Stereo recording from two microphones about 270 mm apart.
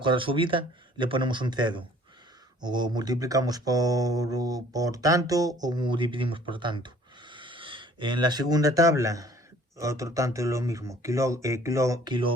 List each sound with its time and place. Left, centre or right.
0.0 s speech: centre